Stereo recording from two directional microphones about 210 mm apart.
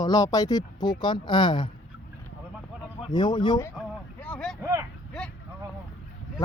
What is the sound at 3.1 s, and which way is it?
Speech, 20° left (ahead or behind).